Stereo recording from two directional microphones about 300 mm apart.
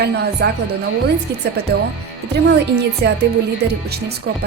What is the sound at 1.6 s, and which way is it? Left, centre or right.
Speech, right.